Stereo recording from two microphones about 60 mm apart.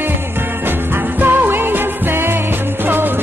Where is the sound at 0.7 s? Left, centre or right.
Right.